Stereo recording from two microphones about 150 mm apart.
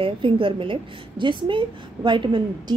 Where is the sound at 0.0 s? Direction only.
35° right (ahead or behind).